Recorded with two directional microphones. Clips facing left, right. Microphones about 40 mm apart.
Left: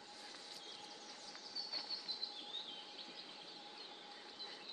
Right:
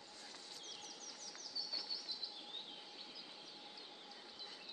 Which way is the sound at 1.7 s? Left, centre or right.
Left.